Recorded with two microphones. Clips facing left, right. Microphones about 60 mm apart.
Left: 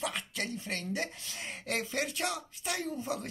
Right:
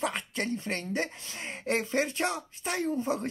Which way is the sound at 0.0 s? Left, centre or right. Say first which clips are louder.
Right 4 dB; right.